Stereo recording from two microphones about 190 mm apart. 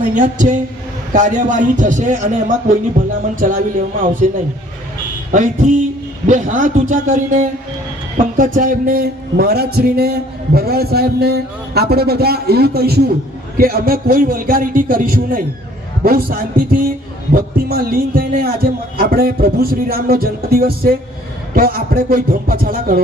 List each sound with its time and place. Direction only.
0.1 s a man's voice: 45° right (ahead or behind)
5.3 s a man's voice: 40° right (ahead or behind)